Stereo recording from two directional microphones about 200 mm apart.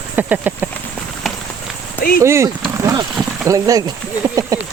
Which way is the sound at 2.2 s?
15° right (ahead or behind).